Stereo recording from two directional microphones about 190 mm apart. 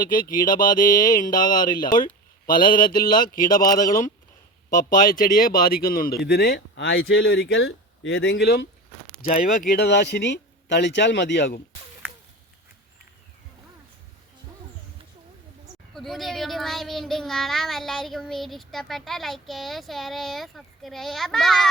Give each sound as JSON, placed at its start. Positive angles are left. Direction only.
{"t": 0.0, "sound": "mantra", "side_deg": 45}
{"t": 0.8, "sound": "speech", "side_deg": 20}
{"t": 2.5, "sound": "mantra", "side_deg": 45}
{"t": 3.5, "sound": "speech", "side_deg": 20}
{"t": 3.8, "sound": "mantra", "side_deg": 45}
{"t": 4.7, "sound": "speech", "side_deg": 45}
{"t": 9.2, "sound": "speech", "side_deg": 45}
{"t": 16.0, "sound": "a child's voice", "side_deg": 0}